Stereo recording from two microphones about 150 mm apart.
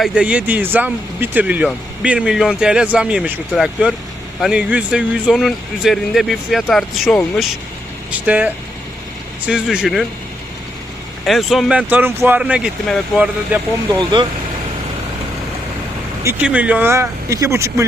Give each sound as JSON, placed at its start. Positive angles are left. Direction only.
{"t": 0.0, "sound": "speech", "side_deg": -5}
{"t": 8.3, "sound": "speech", "side_deg": -10}
{"t": 11.3, "sound": "speech", "side_deg": 0}
{"t": 14.0, "sound": "speech", "side_deg": -30}
{"t": 16.2, "sound": "speech", "side_deg": -10}